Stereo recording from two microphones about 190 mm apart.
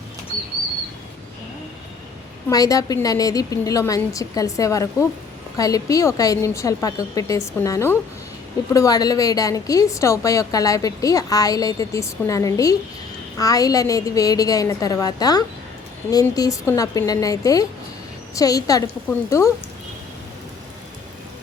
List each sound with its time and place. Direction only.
2.5 s a woman's voice: 20° left (ahead or behind)